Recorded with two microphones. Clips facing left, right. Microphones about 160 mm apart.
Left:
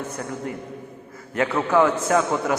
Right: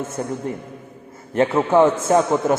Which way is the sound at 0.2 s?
30° right (ahead or behind).